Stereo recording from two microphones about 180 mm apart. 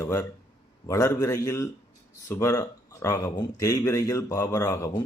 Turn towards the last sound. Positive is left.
turn(degrees=20)  # may be behind; listen again after turning